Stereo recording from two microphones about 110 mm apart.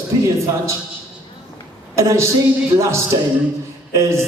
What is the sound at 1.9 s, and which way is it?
A woman's voice, 25° right (ahead or behind).